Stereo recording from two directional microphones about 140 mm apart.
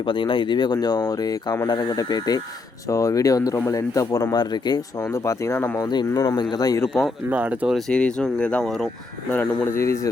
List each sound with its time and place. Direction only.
0.0 s speech: 35° left (ahead or behind); by 5.8 s 15° left (ahead or behind)
5.8 s speech: 30° left (ahead or behind)
7.3 s speech: 10° right (ahead or behind)
7.8 s speech: 5° left (ahead or behind); by 10.1 s 20° left (ahead or behind)